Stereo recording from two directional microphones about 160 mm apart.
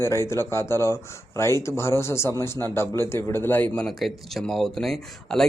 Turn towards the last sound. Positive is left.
turn(degrees=0)  # may be behind; listen again after turning